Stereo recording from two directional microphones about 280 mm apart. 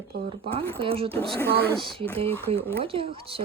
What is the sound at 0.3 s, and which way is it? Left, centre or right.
Speech, centre.